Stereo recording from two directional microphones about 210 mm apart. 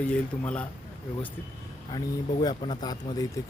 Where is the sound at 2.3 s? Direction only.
25° left (ahead or behind).